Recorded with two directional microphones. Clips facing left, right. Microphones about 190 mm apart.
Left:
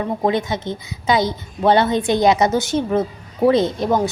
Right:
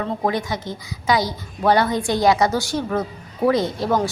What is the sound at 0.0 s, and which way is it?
A woman's voice, 25° left (ahead or behind).